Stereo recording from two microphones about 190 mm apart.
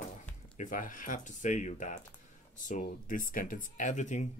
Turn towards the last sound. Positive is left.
turn(degrees=40)  # may be behind; listen again after turning